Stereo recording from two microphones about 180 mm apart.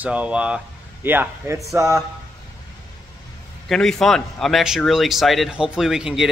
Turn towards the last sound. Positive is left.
turn(degrees=-5)  # may be behind; listen again after turning